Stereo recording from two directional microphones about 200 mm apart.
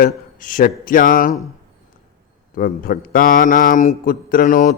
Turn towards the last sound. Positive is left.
turn(degrees=40)  # may be behind; listen again after turning